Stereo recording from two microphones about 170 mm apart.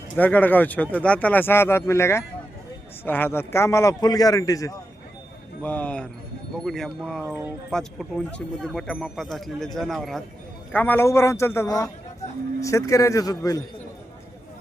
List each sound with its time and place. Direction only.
0.2 s a man's voice: 10° left (ahead or behind)
5.6 s a man's voice: 10° left (ahead or behind)
7.3 s speech: 15° right (ahead or behind)
7.7 s a man's voice: centre (ahead or behind); by 13.6 s 20° left (ahead or behind)